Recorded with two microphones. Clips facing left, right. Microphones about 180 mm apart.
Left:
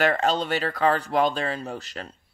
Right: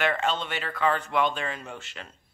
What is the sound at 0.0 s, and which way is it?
Speech, 40° left (ahead or behind).